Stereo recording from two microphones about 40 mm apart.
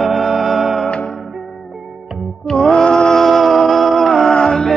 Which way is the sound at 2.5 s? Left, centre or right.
Centre.